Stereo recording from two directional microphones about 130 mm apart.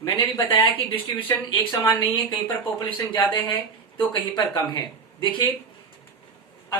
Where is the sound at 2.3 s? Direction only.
25° left (ahead or behind).